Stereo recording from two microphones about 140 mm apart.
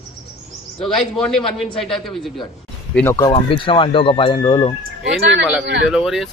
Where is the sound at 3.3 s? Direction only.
40° left (ahead or behind).